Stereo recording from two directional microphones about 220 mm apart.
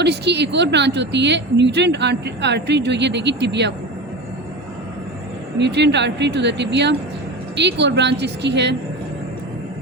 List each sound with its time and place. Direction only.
0.0 s speech: 50° right (ahead or behind)
5.5 s speech: 50° right (ahead or behind)